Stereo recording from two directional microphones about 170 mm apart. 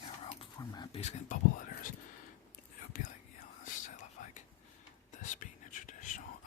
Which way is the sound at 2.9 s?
55° left (ahead or behind).